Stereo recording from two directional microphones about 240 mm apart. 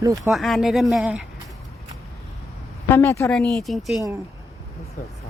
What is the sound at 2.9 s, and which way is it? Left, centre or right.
A woman's voice, centre.